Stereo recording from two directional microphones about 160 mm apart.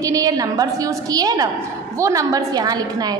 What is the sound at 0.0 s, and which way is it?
A woman's voice, 20° right (ahead or behind).